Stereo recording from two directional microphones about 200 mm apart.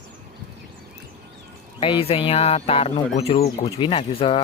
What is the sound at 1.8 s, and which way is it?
Speech, 25° left (ahead or behind).